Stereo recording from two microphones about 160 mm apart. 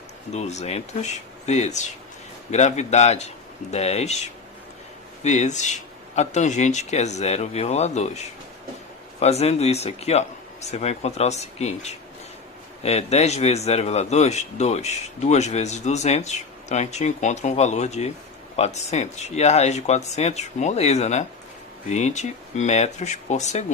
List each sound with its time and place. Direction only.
0.3 s speech: 45° left (ahead or behind)
9.2 s speech: 40° left (ahead or behind)